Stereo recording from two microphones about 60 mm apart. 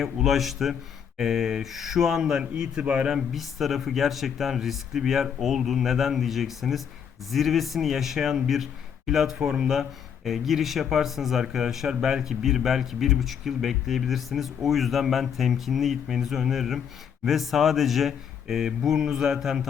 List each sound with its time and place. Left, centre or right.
0.0 s speech: centre; by 3.1 s right
3.1 s speech: centre